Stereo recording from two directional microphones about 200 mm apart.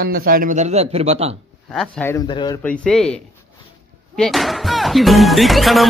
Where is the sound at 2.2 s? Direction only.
20° left (ahead or behind).